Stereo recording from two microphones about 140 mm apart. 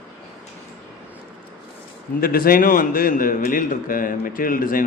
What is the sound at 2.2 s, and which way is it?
A man's voice, 90° left.